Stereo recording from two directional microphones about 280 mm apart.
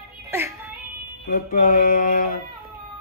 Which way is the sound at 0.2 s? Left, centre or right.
Centre.